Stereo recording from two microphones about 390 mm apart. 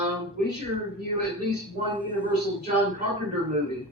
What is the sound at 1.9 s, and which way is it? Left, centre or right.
Speech, centre.